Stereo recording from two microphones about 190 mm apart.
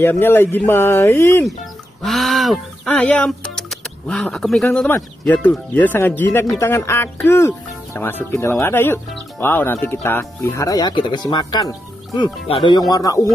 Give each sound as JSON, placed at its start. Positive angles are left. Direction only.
{"t": 0.0, "sound": "speech", "side_deg": 10}
{"t": 2.0, "sound": "speech", "side_deg": 0}